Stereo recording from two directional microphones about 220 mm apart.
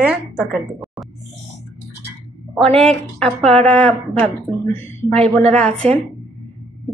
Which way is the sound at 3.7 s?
5° left (ahead or behind).